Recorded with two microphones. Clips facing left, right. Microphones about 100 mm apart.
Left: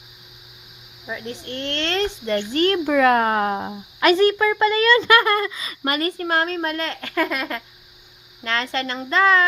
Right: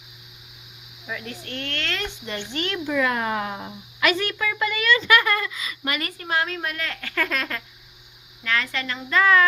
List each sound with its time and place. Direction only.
1.0 s speech: 25° left (ahead or behind); by 2.8 s 40° left (ahead or behind)
2.8 s speech: 60° left (ahead or behind)
4.1 s a child's voice: 35° left (ahead or behind)
8.4 s speech: 30° left (ahead or behind)